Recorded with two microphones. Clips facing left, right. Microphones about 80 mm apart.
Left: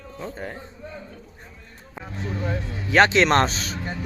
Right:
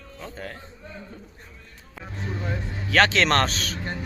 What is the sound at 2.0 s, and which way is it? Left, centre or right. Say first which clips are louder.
Speech: left 3 dB; left.